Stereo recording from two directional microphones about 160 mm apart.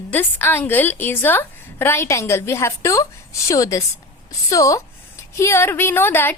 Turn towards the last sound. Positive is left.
turn(degrees=15)  # may be behind; listen again after turning